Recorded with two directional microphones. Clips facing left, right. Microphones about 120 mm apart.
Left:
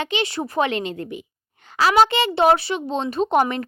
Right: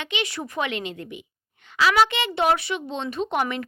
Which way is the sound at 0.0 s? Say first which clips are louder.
Left 5 dB; 35° left (ahead or behind).